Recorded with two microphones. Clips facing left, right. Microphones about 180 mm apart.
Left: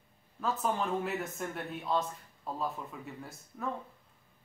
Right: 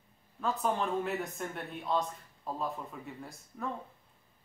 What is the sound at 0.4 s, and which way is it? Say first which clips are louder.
Speech: right 1 dB; centre (ahead or behind).